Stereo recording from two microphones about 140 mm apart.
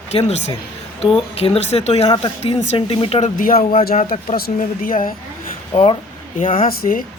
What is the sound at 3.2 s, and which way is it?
Speech, 80° left.